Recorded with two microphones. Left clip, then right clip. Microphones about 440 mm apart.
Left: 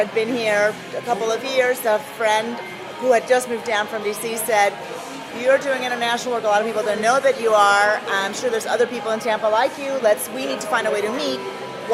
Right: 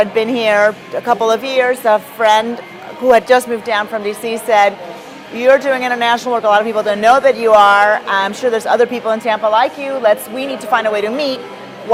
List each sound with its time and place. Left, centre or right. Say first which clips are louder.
0.0 s a woman's voice: right 7 dB; right